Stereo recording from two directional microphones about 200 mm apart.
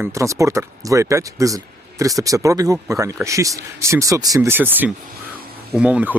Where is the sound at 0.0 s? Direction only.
15° right (ahead or behind).